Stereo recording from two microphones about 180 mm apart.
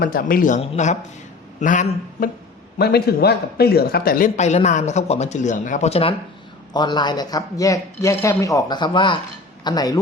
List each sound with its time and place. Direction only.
0.0 s a man's voice: 55° left (ahead or behind)
0.6 s a man's voice: 35° left (ahead or behind)
2.7 s a man's voice: 60° left (ahead or behind)
4.4 s speech: 40° left (ahead or behind); by 10.0 s 20° left (ahead or behind)